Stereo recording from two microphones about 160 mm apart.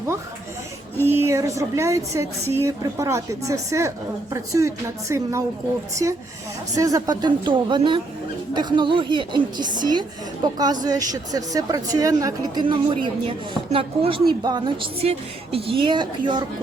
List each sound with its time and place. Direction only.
1.0 s a woman's voice: 15° right (ahead or behind)